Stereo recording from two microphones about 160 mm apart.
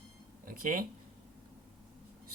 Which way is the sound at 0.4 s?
60° right (ahead or behind).